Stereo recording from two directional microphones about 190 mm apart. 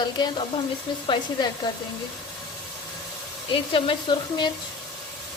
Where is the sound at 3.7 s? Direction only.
25° left (ahead or behind).